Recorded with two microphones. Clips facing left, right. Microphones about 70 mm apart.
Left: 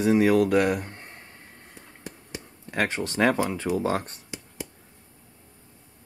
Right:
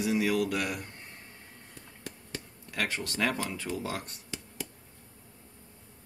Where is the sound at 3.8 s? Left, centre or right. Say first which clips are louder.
Left 10 dB; left.